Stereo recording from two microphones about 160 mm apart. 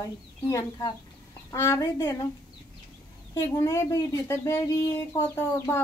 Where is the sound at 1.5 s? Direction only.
15° left (ahead or behind).